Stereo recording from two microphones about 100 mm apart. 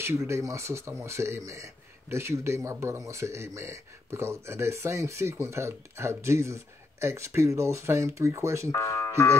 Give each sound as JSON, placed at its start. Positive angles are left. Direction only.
{"t": 0.0, "sound": "speech", "side_deg": -25}
{"t": 8.7, "sound": "speech", "side_deg": 30}